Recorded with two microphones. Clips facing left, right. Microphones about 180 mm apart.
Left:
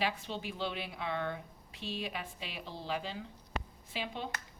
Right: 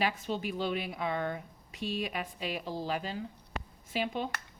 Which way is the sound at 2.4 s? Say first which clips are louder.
Right 8 dB; 45° right (ahead or behind).